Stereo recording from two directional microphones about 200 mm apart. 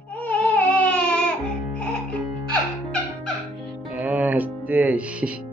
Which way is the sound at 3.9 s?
10° right (ahead or behind).